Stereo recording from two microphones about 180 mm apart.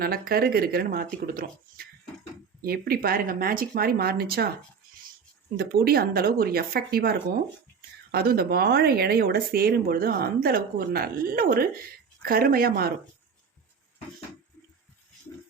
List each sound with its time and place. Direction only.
0.0 s speech: 55° right (ahead or behind)
5.5 s speech: 60° right (ahead or behind)